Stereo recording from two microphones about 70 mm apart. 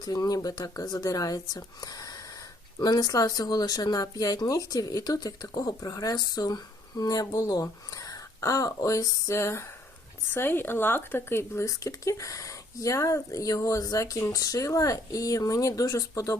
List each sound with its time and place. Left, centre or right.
0.0 s speech: left